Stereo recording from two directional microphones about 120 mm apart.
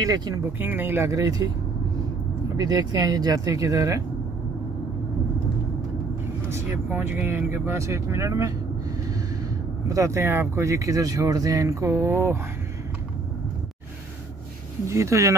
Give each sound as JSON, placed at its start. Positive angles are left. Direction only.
{"t": 0.0, "sound": "speech", "side_deg": -30}
{"t": 0.5, "sound": "speech", "side_deg": -15}
{"t": 2.5, "sound": "speech", "side_deg": -35}
{"t": 6.5, "sound": "speech", "side_deg": -20}
{"t": 9.8, "sound": "speech", "side_deg": -25}
{"t": 14.9, "sound": "speech", "side_deg": -25}